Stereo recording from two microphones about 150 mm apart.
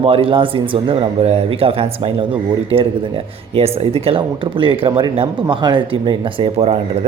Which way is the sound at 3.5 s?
40° right (ahead or behind).